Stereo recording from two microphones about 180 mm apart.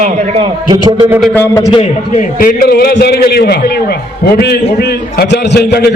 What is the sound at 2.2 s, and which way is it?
A man's voice, 50° left (ahead or behind).